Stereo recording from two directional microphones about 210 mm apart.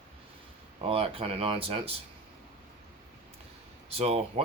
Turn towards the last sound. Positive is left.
turn(degrees=-30)  # may be behind; listen again after turning